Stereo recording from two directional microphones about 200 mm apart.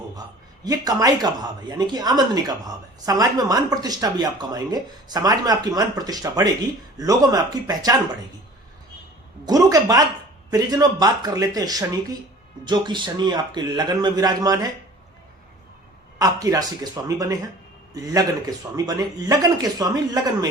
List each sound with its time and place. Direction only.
0.6 s speech: 15° right (ahead or behind)
9.5 s speech: 15° right (ahead or behind)
16.1 s speech: 15° right (ahead or behind)